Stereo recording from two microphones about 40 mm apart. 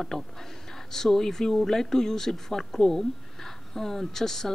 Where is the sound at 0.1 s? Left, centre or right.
Centre.